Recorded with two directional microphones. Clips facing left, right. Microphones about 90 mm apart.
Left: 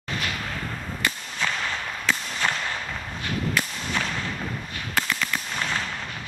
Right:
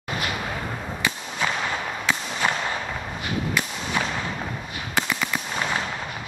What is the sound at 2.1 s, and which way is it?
Whip, 10° right (ahead or behind).